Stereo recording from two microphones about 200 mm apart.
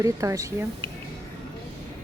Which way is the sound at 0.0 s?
15° right (ahead or behind).